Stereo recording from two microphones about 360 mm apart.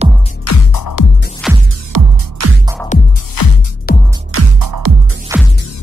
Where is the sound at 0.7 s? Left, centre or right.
Left.